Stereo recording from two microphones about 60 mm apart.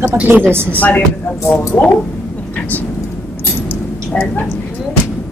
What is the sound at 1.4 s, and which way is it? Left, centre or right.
Speech, left.